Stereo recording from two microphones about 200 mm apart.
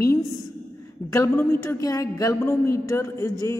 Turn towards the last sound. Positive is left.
turn(degrees=15)  # may be behind; listen again after turning